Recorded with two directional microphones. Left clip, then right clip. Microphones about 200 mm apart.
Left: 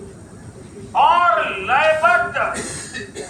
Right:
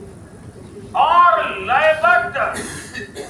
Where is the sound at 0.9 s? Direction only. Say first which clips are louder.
Right 2 dB; 40° right (ahead or behind).